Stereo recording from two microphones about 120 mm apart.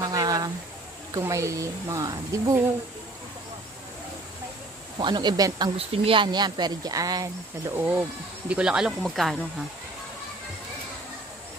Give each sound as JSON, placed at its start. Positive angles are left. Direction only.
{"t": 0.0, "sound": "a sound", "side_deg": -30}
{"t": 1.1, "sound": "speech", "side_deg": -25}
{"t": 4.9, "sound": "speech", "side_deg": -40}
{"t": 5.8, "sound": "speech", "side_deg": -50}
{"t": 7.7, "sound": "speech", "side_deg": -15}